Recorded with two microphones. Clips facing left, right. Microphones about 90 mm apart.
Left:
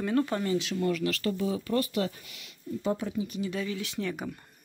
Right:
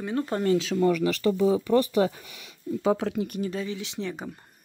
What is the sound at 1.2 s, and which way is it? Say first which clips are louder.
Speech: right 8 dB; 90° right.